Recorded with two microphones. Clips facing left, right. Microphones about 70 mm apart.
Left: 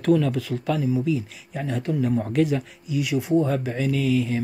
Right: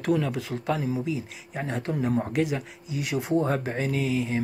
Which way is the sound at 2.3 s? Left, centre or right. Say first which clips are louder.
Left 4 dB; centre.